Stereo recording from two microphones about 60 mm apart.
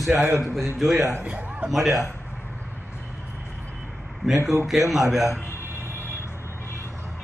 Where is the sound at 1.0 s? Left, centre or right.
Right.